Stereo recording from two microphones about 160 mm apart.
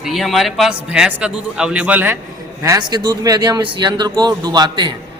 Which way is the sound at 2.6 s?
25° right (ahead or behind).